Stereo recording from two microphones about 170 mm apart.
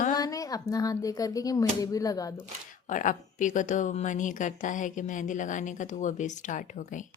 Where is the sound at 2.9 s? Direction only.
50° left (ahead or behind).